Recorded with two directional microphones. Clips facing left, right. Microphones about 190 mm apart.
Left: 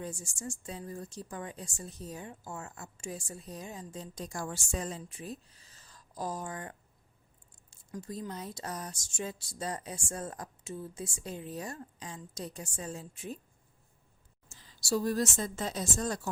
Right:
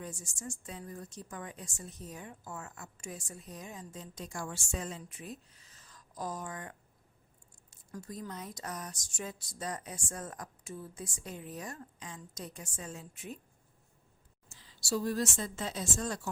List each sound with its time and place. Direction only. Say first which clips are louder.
0.0 s a woman's voice: left 3 dB; 30° left (ahead or behind)
14.5 s a woman's voice: left 3 dB; 45° left (ahead or behind)